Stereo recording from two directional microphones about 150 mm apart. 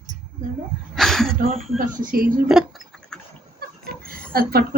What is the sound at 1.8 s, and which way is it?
Speech, 65° right (ahead or behind).